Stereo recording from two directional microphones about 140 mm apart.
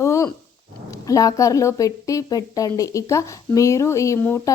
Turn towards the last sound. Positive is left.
turn(degrees=20)  # may be behind; listen again after turning